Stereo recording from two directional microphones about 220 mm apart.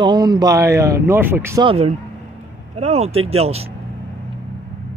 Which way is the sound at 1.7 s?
30° right (ahead or behind).